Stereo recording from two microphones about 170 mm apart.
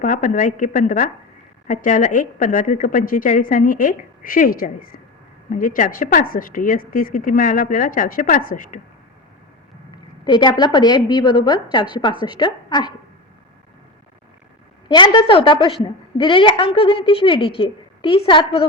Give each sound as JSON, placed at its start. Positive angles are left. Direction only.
{"t": 0.0, "sound": "a woman's voice", "side_deg": 50}
{"t": 10.2, "sound": "a woman's voice", "side_deg": 25}
{"t": 14.8, "sound": "a woman's voice", "side_deg": 25}